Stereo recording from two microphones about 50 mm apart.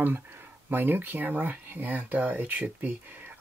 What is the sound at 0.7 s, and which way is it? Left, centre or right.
Speech, right.